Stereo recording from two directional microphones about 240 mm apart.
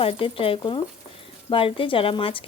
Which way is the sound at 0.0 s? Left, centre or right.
Left.